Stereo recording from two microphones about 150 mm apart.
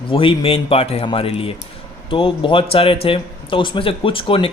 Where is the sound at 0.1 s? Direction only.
35° left (ahead or behind).